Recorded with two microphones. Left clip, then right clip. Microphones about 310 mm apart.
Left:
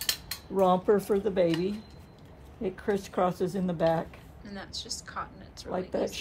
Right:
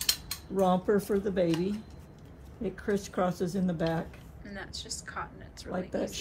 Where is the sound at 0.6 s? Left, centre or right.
Left.